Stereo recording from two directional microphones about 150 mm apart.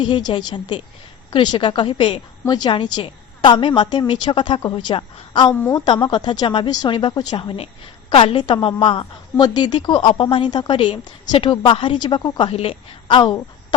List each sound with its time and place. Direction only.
0.0 s a woman's voice: 30° left (ahead or behind)
5.5 s a woman's voice: 15° left (ahead or behind)
5.8 s a woman's voice: 30° left (ahead or behind)